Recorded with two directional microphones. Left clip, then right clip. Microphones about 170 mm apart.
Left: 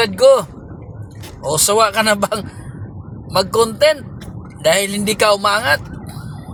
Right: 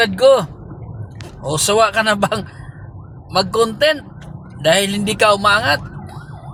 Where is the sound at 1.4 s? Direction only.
25° right (ahead or behind).